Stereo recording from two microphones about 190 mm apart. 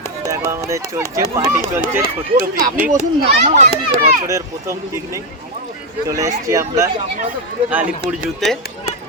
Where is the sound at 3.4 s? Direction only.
40° right (ahead or behind).